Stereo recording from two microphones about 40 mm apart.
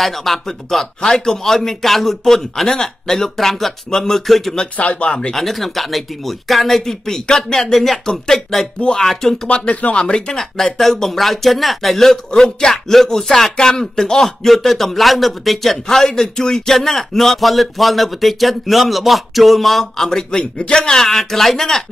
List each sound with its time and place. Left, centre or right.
0.0 s a man's voice: centre
4.7 s speech: left
5.3 s a man's voice: centre
9.5 s speech: left
10.6 s a man's voice: centre
12.3 s a man's voice: centre